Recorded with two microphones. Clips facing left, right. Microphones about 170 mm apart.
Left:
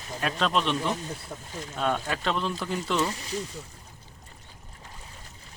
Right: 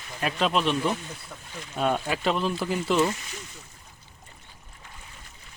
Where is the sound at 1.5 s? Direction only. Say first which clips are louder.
Left 3 dB; 40° left (ahead or behind).